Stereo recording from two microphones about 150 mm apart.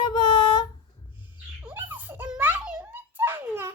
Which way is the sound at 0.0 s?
30° left (ahead or behind).